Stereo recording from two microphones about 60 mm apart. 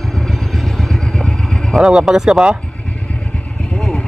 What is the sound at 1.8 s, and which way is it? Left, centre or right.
Speech, centre.